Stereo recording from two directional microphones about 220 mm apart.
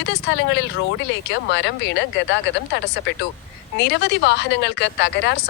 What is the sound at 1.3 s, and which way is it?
Speech, 55° left (ahead or behind).